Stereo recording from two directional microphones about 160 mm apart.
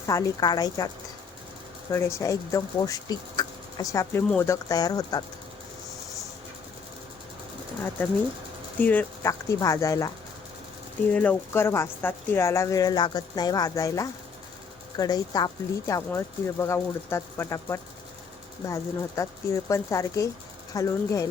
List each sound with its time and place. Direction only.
0.1 s speech: 20° left (ahead or behind)
1.9 s speech: 20° left (ahead or behind)
8.8 s speech: 10° left (ahead or behind)
11.1 s speech: 10° left (ahead or behind)